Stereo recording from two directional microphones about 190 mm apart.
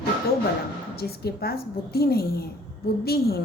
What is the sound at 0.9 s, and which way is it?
Speech, 55° left (ahead or behind).